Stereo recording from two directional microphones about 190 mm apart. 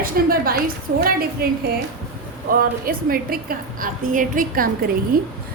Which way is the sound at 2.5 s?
50° right (ahead or behind).